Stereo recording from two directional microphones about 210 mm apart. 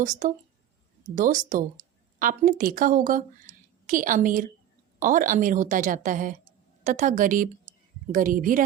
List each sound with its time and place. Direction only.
0.0 s speech: 35° right (ahead or behind)